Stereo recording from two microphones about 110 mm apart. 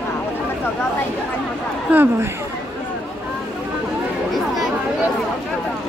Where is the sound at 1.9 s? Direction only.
20° right (ahead or behind).